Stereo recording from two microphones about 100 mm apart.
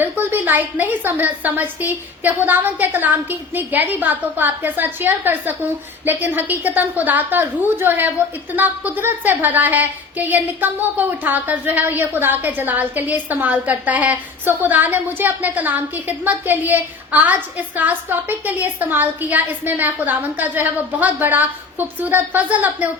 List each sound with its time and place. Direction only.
0.0 s a woman's voice: 20° right (ahead or behind)